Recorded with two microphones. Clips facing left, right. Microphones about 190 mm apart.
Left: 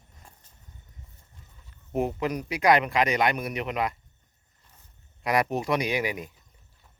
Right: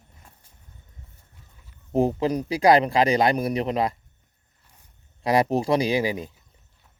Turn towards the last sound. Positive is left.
turn(degrees=-30)  # may be behind; listen again after turning